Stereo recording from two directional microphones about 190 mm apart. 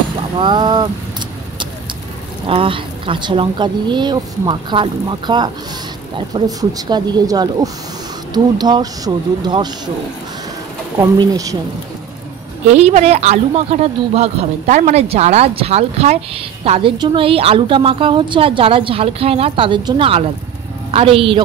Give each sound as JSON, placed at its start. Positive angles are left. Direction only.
{"t": 0.4, "sound": "a woman's voice", "side_deg": -25}
{"t": 2.4, "sound": "a woman's voice", "side_deg": -30}
{"t": 11.0, "sound": "speech", "side_deg": -20}
{"t": 12.7, "sound": "a woman's voice", "side_deg": -35}